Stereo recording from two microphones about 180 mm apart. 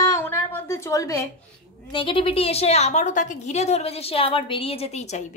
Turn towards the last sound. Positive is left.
turn(degrees=40)  # may be behind; listen again after turning